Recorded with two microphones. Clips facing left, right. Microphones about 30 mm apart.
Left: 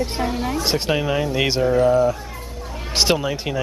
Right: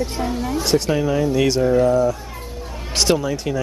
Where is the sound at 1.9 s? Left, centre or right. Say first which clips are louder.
Even; left.